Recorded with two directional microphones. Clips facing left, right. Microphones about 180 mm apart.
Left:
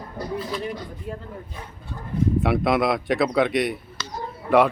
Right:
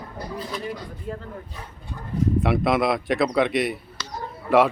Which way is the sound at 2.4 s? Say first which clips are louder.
Even; centre (ahead or behind).